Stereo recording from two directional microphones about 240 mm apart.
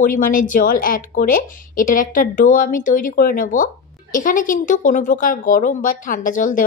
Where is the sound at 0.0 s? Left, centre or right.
Left.